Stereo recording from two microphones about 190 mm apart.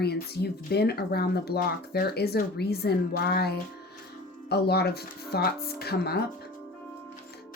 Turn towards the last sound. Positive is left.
turn(degrees=55)  # may be behind; listen again after turning